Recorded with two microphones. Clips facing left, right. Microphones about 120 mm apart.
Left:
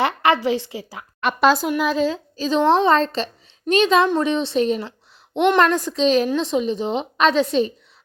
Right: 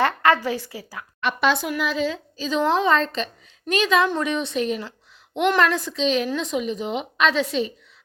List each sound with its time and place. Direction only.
0.0 s a woman's voice: 15° left (ahead or behind)
1.2 s a woman's voice: 40° left (ahead or behind)